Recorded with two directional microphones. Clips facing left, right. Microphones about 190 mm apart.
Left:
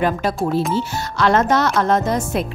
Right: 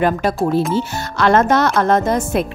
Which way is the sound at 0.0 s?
50° right (ahead or behind).